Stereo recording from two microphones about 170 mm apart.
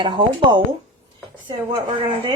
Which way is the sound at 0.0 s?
30° right (ahead or behind).